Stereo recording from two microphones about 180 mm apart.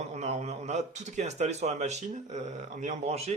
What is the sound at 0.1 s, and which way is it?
Speech, 35° right (ahead or behind).